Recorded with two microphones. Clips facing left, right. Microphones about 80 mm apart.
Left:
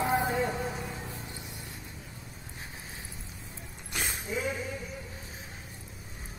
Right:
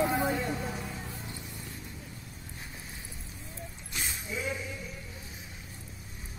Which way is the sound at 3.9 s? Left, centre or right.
Left.